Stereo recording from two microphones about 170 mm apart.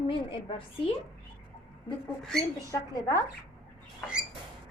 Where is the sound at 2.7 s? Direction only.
20° left (ahead or behind).